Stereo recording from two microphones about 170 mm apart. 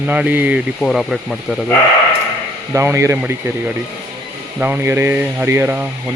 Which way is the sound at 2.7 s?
15° right (ahead or behind).